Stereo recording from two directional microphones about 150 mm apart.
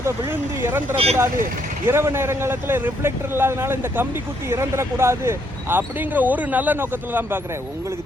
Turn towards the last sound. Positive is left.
turn(degrees=-15)  # may be behind; listen again after turning